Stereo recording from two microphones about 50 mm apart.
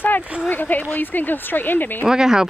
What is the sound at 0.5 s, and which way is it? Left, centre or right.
Speech, left.